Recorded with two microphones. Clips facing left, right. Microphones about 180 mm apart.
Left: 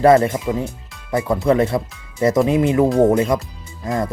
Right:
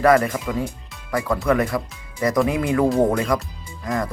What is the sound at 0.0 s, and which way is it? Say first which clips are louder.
Speech: left 4 dB; 25° left (ahead or behind).